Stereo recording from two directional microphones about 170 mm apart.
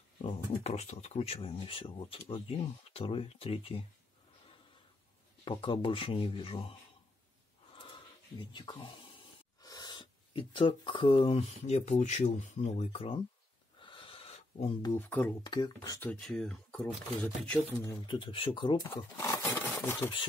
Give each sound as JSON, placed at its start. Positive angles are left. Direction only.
{"t": 0.2, "sound": "speech", "side_deg": 40}
{"t": 5.4, "sound": "speech", "side_deg": 30}
{"t": 7.7, "sound": "a sound", "side_deg": 30}
{"t": 9.6, "sound": "speech", "side_deg": 25}
{"t": 13.7, "sound": "a sound", "side_deg": 30}
{"t": 14.8, "sound": "speech", "side_deg": 15}
{"t": 15.4, "sound": "speech", "side_deg": 25}
{"t": 16.0, "sound": "speech", "side_deg": 5}
{"t": 17.8, "sound": "speech", "side_deg": 25}
{"t": 18.9, "sound": "speech", "side_deg": 15}
{"t": 19.5, "sound": "filing", "side_deg": 10}